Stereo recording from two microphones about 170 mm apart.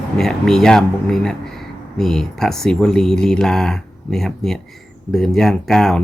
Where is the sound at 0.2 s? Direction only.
5° left (ahead or behind).